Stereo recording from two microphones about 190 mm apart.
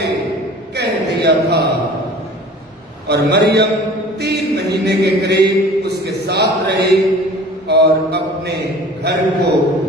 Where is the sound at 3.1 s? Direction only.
60° right (ahead or behind).